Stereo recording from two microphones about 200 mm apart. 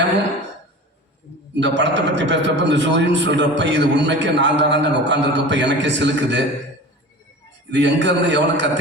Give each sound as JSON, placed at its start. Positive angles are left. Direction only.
{"t": 1.5, "sound": "a man's voice", "side_deg": -60}
{"t": 7.7, "sound": "a man's voice", "side_deg": -60}